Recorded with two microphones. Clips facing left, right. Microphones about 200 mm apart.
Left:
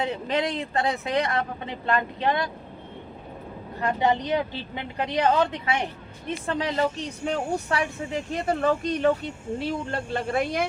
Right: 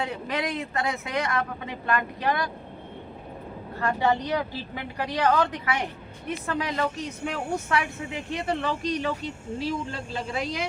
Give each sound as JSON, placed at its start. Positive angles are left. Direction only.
{"t": 0.0, "sound": "speech", "side_deg": 25}
{"t": 3.8, "sound": "a woman's voice", "side_deg": 20}